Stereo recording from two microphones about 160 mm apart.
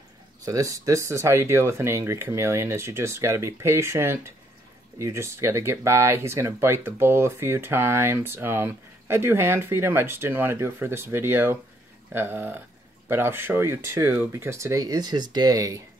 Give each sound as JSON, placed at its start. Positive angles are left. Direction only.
{"t": 0.5, "sound": "speech", "side_deg": -20}